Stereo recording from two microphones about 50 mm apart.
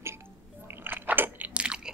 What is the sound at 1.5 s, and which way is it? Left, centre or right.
Chewing, centre.